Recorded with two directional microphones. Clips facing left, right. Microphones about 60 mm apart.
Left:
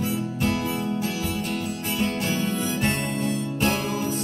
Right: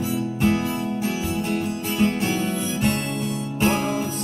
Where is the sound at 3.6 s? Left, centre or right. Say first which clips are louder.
Right 4 dB; right.